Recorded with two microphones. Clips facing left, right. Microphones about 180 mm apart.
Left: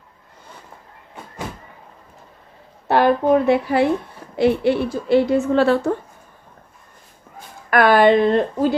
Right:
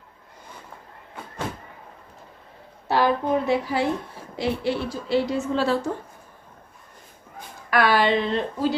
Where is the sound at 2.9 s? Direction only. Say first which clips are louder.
Left 6 dB; 60° left (ahead or behind).